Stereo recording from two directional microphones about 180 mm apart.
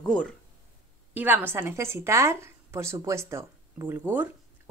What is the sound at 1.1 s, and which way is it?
A woman's voice, 10° right (ahead or behind).